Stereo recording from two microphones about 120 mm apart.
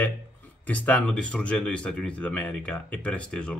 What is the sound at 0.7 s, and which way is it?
Speech, 15° left (ahead or behind).